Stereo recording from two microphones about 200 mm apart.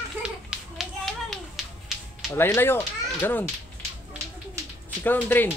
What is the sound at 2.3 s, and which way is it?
Speech, 10° left (ahead or behind).